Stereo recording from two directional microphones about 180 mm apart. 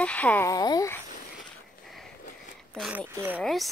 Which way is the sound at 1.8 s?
Centre (ahead or behind).